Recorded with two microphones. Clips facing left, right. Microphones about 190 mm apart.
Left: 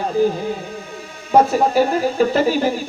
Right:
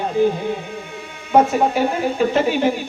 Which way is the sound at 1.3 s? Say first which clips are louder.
Left 1 dB; 35° left (ahead or behind).